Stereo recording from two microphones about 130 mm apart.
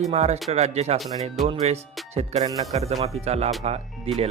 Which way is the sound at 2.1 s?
55° right (ahead or behind).